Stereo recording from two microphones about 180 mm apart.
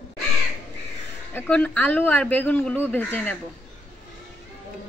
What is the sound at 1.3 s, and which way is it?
Speech, 10° left (ahead or behind).